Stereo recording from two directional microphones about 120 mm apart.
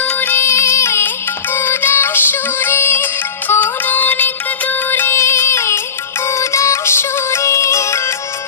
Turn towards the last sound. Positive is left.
turn(degrees=25)  # may be behind; listen again after turning